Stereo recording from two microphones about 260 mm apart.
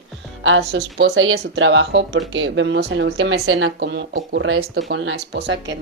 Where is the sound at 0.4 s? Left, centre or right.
Right.